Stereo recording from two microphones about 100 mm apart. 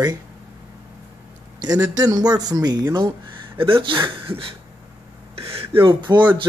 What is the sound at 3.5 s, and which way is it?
Speech, 60° right (ahead or behind).